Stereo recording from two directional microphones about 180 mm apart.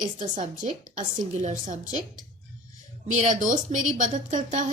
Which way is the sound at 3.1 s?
45° right (ahead or behind).